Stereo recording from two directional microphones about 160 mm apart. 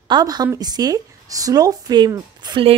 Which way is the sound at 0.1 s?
25° right (ahead or behind).